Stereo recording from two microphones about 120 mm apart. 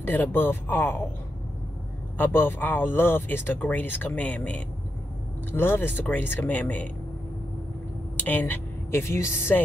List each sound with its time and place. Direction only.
0.0 s speech: 15° left (ahead or behind)
2.1 s speech: 20° left (ahead or behind)
8.2 s a woman's voice: 15° left (ahead or behind)